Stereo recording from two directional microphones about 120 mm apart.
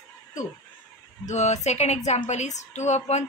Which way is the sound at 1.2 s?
75° left (ahead or behind).